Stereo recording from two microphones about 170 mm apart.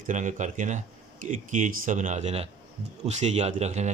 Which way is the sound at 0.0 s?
45° right (ahead or behind).